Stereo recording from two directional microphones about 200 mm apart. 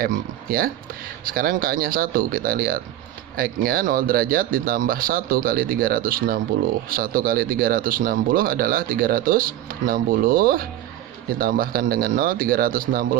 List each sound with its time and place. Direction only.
0.0 s speech: 45° right (ahead or behind)